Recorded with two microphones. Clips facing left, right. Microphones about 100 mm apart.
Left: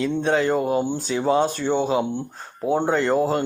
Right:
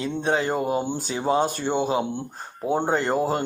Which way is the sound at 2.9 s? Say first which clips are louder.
Left 3 dB; 35° right (ahead or behind).